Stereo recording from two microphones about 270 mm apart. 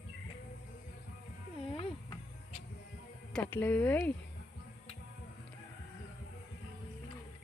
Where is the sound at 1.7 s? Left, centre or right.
Left.